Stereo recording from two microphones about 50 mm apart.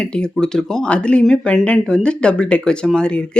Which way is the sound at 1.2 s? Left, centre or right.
Centre.